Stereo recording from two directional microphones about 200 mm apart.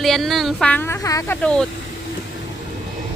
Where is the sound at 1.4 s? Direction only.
5° left (ahead or behind).